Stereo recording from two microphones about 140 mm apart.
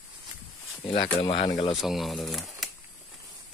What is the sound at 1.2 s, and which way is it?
Speech, 40° left (ahead or behind).